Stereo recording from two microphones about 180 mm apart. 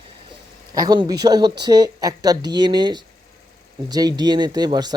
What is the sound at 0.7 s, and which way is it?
Speech, 20° right (ahead or behind).